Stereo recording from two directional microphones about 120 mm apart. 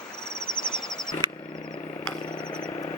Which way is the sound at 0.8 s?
5° left (ahead or behind).